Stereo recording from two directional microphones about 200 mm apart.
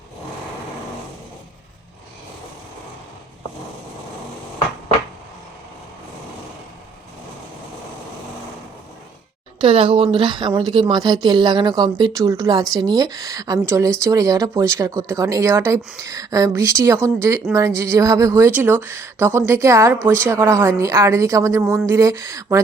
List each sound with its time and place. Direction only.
9.6 s speech: 25° right (ahead or behind)